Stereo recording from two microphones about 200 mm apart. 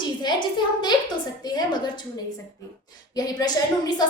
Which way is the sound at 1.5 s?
20° left (ahead or behind).